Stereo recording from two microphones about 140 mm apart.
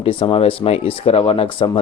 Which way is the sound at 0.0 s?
45° left (ahead or behind).